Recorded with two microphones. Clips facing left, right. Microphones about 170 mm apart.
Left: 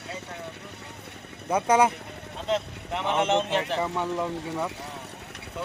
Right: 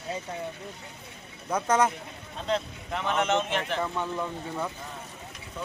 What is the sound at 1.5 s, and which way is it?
Speech, 10° left (ahead or behind).